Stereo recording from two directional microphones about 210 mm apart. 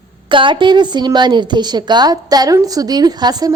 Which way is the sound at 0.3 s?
25° right (ahead or behind).